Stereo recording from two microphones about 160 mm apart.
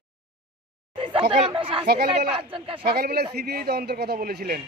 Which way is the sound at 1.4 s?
30° right (ahead or behind).